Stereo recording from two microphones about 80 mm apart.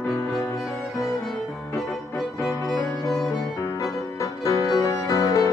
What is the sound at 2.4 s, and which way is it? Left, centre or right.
Music, left.